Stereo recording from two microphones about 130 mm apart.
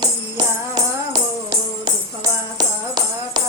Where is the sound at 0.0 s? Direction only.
30° right (ahead or behind).